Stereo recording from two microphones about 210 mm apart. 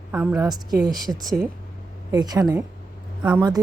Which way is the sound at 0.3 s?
20° right (ahead or behind).